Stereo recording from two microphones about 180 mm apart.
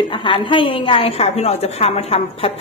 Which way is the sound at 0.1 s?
25° left (ahead or behind).